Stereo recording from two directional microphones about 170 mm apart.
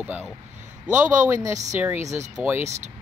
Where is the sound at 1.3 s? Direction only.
20° right (ahead or behind).